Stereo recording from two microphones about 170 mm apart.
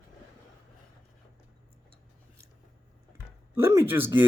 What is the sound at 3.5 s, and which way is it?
Speech, 15° right (ahead or behind).